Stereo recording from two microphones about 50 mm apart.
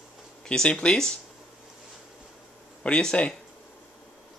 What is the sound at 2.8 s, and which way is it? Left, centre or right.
Speech, centre.